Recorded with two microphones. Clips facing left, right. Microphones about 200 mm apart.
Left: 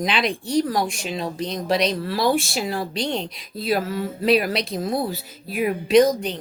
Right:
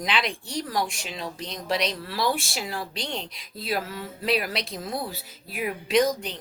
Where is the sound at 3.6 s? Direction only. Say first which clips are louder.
Left 7 dB; 30° left (ahead or behind).